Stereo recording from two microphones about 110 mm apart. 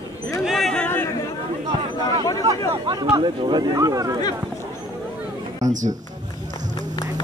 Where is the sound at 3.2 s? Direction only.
40° right (ahead or behind).